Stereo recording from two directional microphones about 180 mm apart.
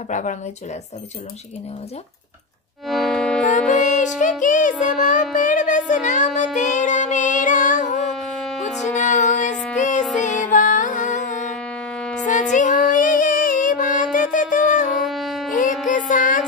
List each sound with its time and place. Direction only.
0.1 s a woman's voice: 45° left (ahead or behind)
2.9 s music: centre (ahead or behind)
3.9 s music: 45° left (ahead or behind)
12.0 s music: 5° left (ahead or behind)
12.3 s child singing: 45° left (ahead or behind)
15.0 s shofar: centre (ahead or behind)
15.5 s music: 45° left (ahead or behind)